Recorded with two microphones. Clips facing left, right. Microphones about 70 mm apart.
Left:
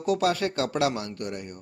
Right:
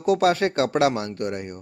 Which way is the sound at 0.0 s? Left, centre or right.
Right.